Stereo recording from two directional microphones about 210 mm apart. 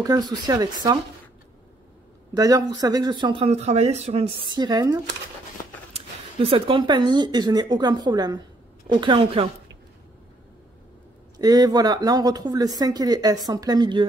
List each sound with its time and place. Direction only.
0.0 s speech: 15° right (ahead or behind)
2.3 s speech: 15° right (ahead or behind)
11.3 s speech: 20° right (ahead or behind)